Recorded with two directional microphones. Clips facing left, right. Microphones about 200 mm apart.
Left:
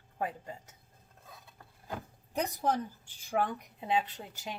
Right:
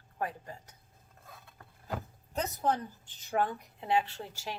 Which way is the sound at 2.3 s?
15° left (ahead or behind).